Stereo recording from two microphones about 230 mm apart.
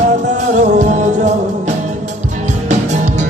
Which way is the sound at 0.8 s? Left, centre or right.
Right.